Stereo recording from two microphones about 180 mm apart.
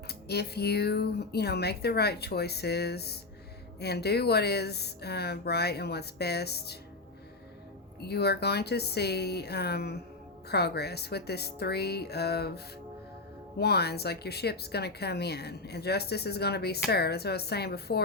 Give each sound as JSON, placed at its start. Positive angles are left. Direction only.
{"t": 0.1, "sound": "speech", "side_deg": 65}
{"t": 8.0, "sound": "speech", "side_deg": 65}